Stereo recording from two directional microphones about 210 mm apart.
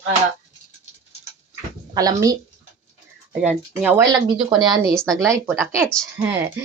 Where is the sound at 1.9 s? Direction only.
15° right (ahead or behind).